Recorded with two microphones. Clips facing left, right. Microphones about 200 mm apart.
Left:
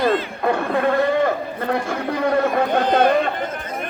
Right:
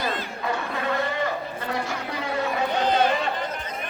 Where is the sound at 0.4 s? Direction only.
55° left (ahead or behind).